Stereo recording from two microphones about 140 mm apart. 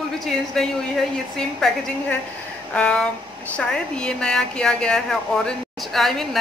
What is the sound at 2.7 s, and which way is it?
A woman's voice, 10° left (ahead or behind).